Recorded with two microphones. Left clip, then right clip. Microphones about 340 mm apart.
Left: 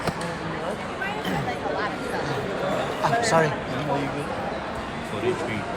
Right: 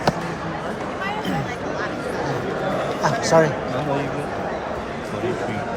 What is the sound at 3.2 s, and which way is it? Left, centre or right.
Speech, centre.